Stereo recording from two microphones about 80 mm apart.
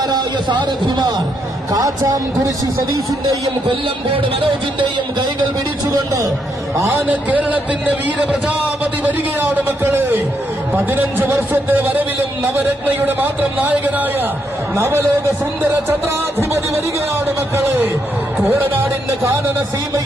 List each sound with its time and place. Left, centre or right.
0.0 s a man's voice: right
1.7 s speech: right
3.7 s speech: right
6.7 s speech: right
7.1 s a man's voice: centre
14.8 s speech: right
17.5 s a sound: right
18.4 s speech: right